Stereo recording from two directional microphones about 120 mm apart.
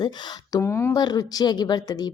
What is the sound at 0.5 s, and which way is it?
Speech, 20° left (ahead or behind).